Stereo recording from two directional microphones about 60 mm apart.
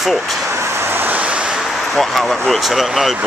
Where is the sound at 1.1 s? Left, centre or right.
Right.